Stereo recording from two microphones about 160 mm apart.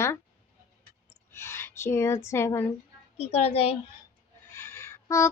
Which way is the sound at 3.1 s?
40° left (ahead or behind).